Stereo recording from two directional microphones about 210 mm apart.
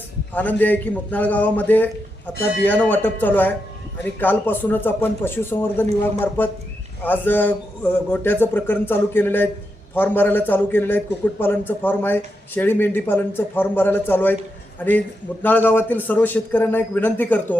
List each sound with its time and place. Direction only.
0.3 s a man's voice: 10° left (ahead or behind)
15.4 s a man's voice: 10° left (ahead or behind)